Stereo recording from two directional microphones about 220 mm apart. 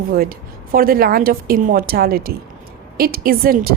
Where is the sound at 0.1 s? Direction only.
40° right (ahead or behind).